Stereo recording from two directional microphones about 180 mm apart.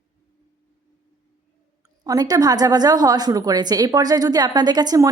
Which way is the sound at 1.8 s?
20° right (ahead or behind).